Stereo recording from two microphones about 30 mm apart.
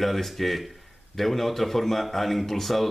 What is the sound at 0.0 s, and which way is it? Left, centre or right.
Speech, centre.